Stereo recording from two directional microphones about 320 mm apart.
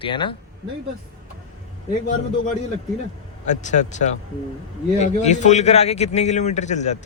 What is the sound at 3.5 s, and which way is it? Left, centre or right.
A man's voice, left.